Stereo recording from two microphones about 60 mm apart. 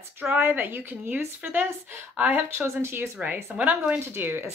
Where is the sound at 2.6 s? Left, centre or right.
Right.